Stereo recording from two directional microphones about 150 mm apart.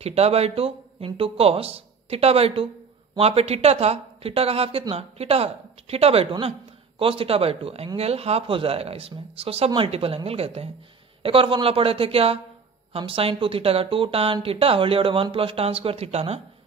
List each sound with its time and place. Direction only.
0.0 s speech: 40° right (ahead or behind)